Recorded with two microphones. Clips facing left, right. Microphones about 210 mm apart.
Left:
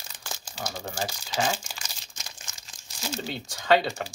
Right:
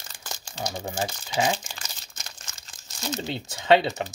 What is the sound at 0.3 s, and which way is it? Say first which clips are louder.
Crumpling: right 3 dB; 5° left (ahead or behind).